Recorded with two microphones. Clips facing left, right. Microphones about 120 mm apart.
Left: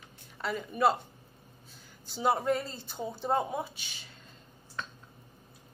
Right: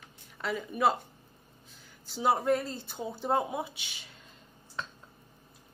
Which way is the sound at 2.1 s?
10° right (ahead or behind).